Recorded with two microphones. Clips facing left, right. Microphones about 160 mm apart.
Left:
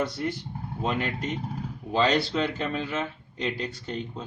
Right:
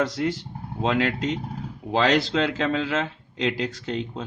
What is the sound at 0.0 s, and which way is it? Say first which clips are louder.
Speech: right 4 dB; 90° right.